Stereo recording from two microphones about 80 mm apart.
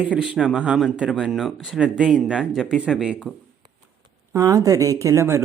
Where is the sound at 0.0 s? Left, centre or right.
Centre.